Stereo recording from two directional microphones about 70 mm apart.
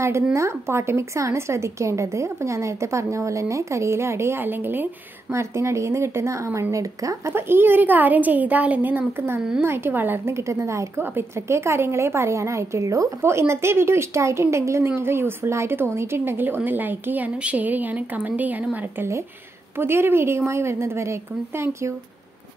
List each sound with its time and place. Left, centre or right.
0.0 s a woman's voice: right
5.3 s a woman's voice: right
7.3 s a woman's voice: right
13.2 s a woman's voice: right
19.8 s a woman's voice: right